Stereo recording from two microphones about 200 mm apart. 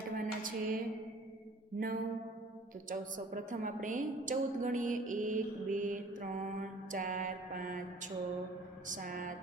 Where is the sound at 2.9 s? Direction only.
40° right (ahead or behind).